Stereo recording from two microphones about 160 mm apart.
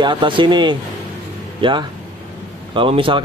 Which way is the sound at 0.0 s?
30° right (ahead or behind).